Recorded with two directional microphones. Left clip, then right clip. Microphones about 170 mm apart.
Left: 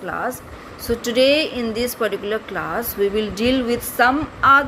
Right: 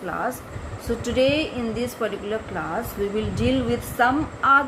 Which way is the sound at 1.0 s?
30° left (ahead or behind).